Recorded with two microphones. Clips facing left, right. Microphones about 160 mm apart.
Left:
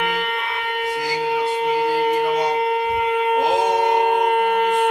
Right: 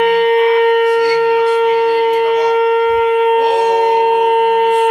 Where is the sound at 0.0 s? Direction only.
50° right (ahead or behind).